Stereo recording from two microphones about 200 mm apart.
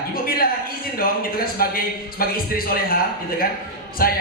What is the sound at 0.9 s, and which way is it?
A man's voice, 45° left (ahead or behind).